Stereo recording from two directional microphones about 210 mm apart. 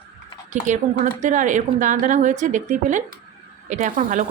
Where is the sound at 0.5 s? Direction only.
35° right (ahead or behind).